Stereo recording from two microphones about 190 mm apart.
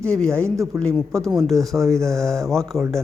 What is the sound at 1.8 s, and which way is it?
Speech, 15° right (ahead or behind).